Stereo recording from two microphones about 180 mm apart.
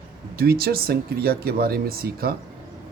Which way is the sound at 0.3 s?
55° right (ahead or behind).